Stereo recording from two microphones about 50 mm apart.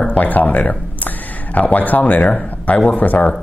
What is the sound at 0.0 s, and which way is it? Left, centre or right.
Speech, left.